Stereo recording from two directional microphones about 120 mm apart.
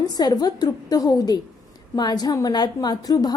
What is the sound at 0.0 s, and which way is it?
A woman's voice, 35° left (ahead or behind).